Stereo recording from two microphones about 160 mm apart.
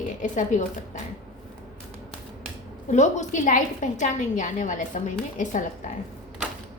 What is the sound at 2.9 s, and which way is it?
A woman's voice, 50° left (ahead or behind).